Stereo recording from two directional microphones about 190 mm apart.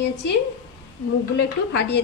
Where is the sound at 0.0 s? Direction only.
65° left (ahead or behind).